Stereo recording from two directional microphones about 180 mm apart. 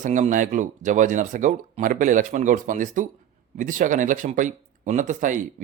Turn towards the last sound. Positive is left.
turn(degrees=-45)  # may be behind; listen again after turning